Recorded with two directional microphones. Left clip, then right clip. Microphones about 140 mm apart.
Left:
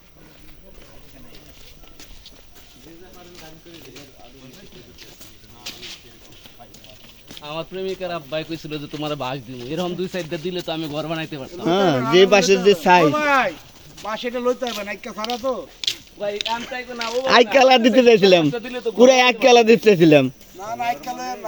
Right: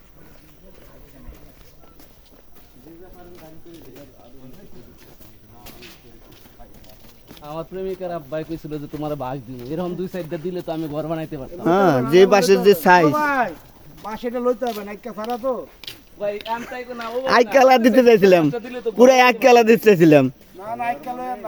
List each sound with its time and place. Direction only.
5.7 s a sound: 15° right (ahead or behind)
7.4 s speech: centre (ahead or behind); by 11.4 s 30° right (ahead or behind)
11.6 s speech: 10° right (ahead or behind)
13.1 s speech: 90° right
14.4 s speech: 50° right (ahead or behind)
15.4 s speech: 10° right (ahead or behind)
15.8 s a sound: 50° right (ahead or behind)
16.7 s speech: 60° left (ahead or behind)
17.2 s speech: centre (ahead or behind)
18.5 s a man's voice: 35° left (ahead or behind)
18.9 s speech: 10° right (ahead or behind)